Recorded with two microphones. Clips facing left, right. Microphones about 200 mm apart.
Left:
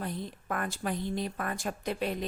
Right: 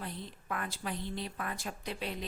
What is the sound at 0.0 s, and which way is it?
A woman's voice, 45° left (ahead or behind).